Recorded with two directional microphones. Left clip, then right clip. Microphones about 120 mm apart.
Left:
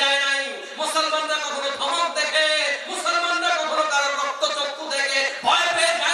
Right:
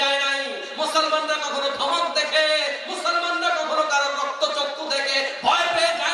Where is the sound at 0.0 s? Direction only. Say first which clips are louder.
Left 1 dB; 15° right (ahead or behind).